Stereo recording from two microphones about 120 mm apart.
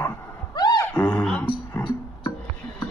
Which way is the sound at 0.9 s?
10° left (ahead or behind).